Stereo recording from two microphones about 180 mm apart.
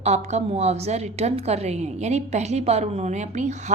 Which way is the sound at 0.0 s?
40° right (ahead or behind).